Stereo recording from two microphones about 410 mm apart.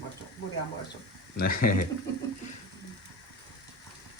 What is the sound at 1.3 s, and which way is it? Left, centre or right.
Speech, left.